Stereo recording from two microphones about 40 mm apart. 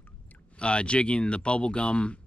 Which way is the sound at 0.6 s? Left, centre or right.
Left.